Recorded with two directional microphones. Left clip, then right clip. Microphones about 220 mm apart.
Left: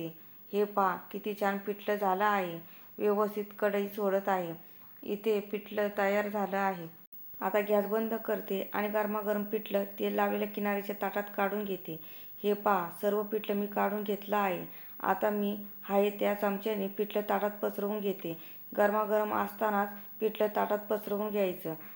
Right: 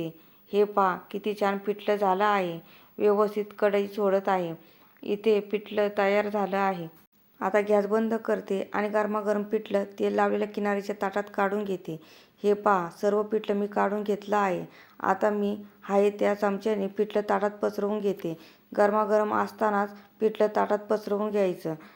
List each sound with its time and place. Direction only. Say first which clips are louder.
0.5 s speech: right 6 dB; 25° right (ahead or behind)